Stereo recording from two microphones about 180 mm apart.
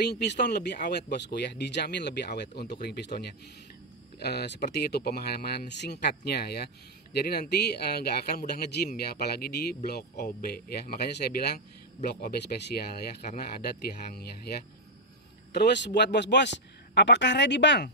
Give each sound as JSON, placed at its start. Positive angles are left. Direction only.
{"t": 0.1, "sound": "speech", "side_deg": 70}
{"t": 14.1, "sound": "speech", "side_deg": 60}
{"t": 15.5, "sound": "speech", "side_deg": 70}